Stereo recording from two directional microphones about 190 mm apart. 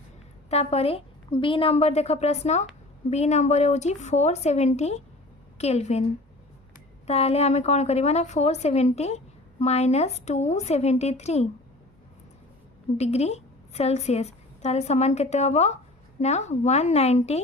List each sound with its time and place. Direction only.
0.5 s a woman's voice: 35° left (ahead or behind)
7.1 s a woman's voice: 35° left (ahead or behind)
13.0 s a woman's voice: 35° left (ahead or behind)